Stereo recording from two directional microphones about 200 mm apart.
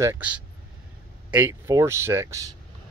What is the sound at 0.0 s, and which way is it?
Speech, 10° right (ahead or behind).